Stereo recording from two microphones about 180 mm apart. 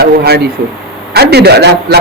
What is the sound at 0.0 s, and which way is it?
A man's voice, 60° right (ahead or behind).